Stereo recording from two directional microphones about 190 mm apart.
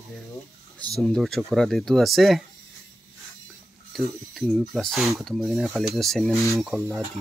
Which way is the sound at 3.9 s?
Centre (ahead or behind).